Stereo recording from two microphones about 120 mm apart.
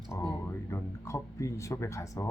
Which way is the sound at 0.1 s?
25° left (ahead or behind).